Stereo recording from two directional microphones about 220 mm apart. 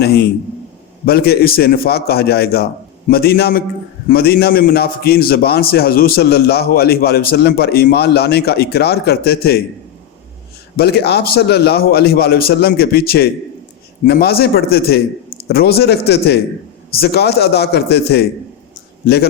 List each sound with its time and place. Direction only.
0.0 s a man's voice: 50° left (ahead or behind)
10.8 s a man's voice: 45° left (ahead or behind)
18.7 s a sound: 45° left (ahead or behind)